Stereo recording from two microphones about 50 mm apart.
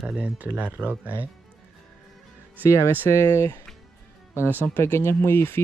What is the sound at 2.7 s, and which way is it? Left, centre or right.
Speech, left.